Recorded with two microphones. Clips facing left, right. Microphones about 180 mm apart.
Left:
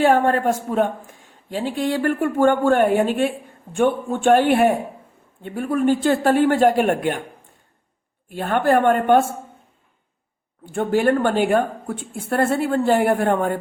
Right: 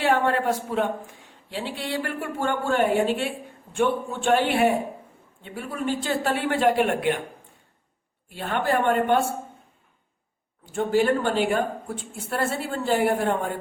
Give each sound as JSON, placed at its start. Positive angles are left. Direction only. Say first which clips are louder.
{"t": 0.0, "sound": "speech", "louder": "left 5 dB", "side_deg": 45}
{"t": 8.3, "sound": "speech", "louder": "left 6 dB", "side_deg": 50}
{"t": 10.7, "sound": "a woman's voice", "louder": "left 3 dB", "side_deg": 60}